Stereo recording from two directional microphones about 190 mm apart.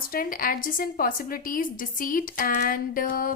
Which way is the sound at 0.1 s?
50° left (ahead or behind).